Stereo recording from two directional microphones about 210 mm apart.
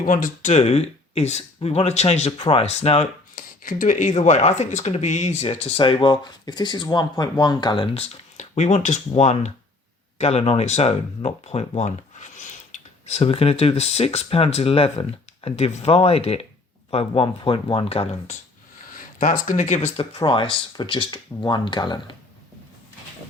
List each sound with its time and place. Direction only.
0.0 s speech: 40° left (ahead or behind)
3.3 s speech: 40° left (ahead or behind)
18.9 s speech: 40° left (ahead or behind); by 22.1 s 20° left (ahead or behind)